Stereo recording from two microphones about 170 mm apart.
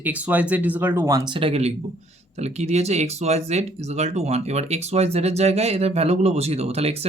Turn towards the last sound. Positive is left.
turn(degrees=-35)  # may be behind; listen again after turning